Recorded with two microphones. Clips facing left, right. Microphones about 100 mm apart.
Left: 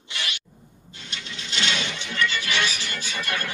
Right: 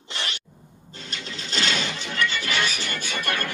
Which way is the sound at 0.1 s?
35° right (ahead or behind).